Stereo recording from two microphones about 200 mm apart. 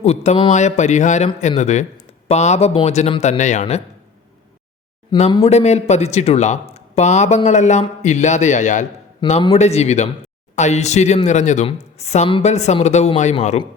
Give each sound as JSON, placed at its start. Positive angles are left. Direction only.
{"t": 0.0, "sound": "speech", "side_deg": 35}
{"t": 5.3, "sound": "speech", "side_deg": 30}